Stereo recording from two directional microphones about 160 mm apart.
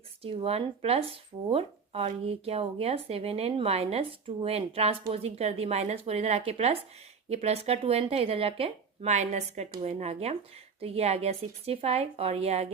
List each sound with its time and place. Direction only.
0.2 s speech: 35° right (ahead or behind)